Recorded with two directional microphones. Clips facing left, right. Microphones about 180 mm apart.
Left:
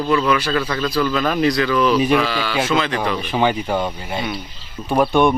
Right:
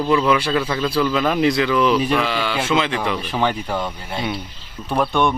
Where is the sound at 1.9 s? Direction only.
5° left (ahead or behind).